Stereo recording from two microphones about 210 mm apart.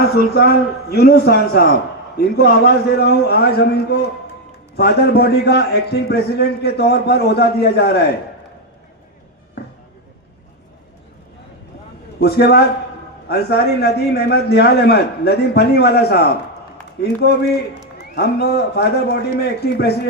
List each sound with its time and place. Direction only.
0.3 s a man's voice: 50° left (ahead or behind)
12.2 s a man's voice: 50° left (ahead or behind)